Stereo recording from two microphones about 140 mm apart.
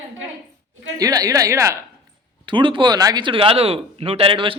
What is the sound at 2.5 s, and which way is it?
Speech, 35° right (ahead or behind).